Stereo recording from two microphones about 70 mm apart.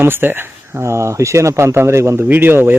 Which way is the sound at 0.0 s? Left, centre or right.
Right.